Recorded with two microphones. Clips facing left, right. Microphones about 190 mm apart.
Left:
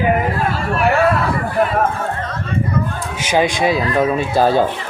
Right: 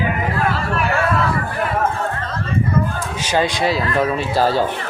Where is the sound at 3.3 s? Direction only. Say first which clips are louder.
Left 3 dB; 15° left (ahead or behind).